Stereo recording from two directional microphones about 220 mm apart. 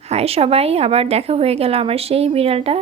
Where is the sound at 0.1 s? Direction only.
25° right (ahead or behind).